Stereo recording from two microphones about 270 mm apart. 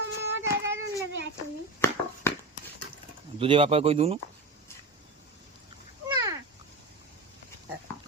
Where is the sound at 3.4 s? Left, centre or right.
Centre.